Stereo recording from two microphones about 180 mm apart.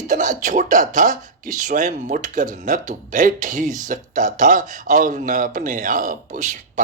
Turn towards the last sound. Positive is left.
turn(degrees=-45)  # may be behind; listen again after turning